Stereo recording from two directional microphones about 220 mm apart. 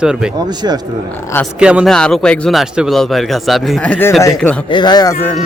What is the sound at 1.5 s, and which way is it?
A man's voice, 5° right (ahead or behind).